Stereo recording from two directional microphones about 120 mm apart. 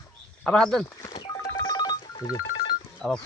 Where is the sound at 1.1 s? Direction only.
40° left (ahead or behind).